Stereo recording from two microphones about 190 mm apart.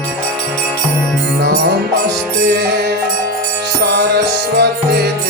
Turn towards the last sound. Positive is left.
turn(degrees=-60)  # may be behind; listen again after turning